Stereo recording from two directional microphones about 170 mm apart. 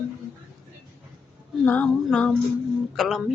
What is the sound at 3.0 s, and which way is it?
Speech, centre (ahead or behind).